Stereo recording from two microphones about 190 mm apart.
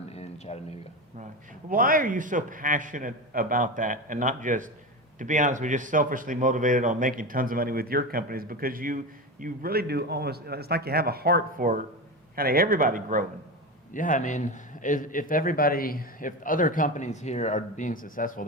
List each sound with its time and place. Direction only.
0.1 s a sound: 35° left (ahead or behind)
1.7 s a man's voice: 45° right (ahead or behind)
13.9 s a man's voice: 45° left (ahead or behind)